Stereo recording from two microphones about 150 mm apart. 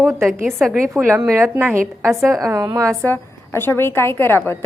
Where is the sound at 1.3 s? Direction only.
15° right (ahead or behind).